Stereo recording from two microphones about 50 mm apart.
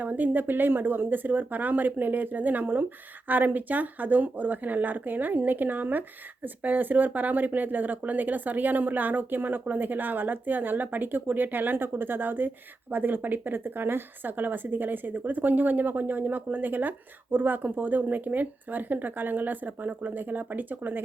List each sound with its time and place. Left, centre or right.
0.0 s speech: right